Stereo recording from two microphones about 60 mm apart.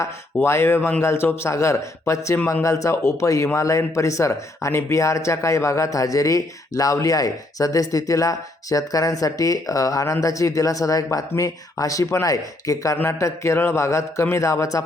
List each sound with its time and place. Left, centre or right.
0.4 s speech: left
2.9 s speech: left
13.1 s speech: left